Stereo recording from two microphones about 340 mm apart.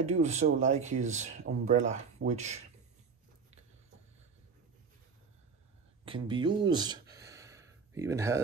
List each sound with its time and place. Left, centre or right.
0.0 s speech: centre
6.0 s speech: centre